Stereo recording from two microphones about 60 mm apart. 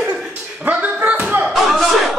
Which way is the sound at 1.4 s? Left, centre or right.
Centre.